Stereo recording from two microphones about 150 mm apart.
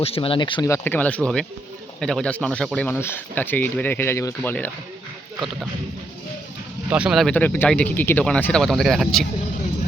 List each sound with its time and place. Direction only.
0.0 s speech: 40° left (ahead or behind)
0.7 s speech: 10° left (ahead or behind)
6.9 s speech: 5° right (ahead or behind)